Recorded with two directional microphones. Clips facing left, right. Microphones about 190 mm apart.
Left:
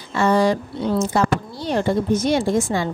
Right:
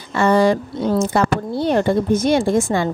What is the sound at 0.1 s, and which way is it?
Speech, 55° right (ahead or behind).